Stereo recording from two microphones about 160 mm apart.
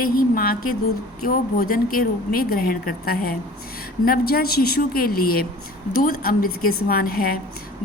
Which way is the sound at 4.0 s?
70° left (ahead or behind).